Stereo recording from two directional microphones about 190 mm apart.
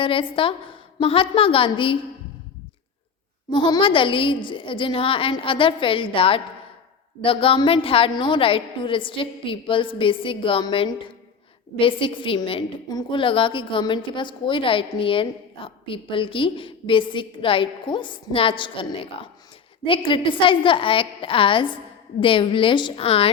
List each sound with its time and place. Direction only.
0.0 s a woman's voice: 25° left (ahead or behind)
3.5 s a woman's voice: 25° left (ahead or behind)